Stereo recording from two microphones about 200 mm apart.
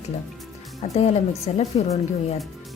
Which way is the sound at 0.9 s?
30° left (ahead or behind).